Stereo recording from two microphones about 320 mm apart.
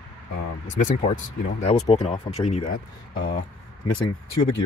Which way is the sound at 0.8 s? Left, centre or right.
Centre.